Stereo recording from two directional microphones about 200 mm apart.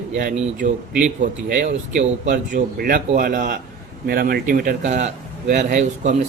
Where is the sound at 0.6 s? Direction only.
40° right (ahead or behind).